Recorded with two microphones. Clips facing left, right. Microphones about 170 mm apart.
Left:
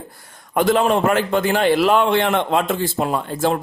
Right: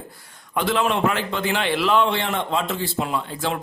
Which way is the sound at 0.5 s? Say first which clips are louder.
Left 5 dB; 45° left (ahead or behind).